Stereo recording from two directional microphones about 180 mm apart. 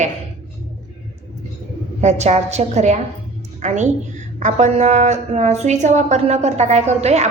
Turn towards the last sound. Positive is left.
turn(degrees=-35)  # may be behind; listen again after turning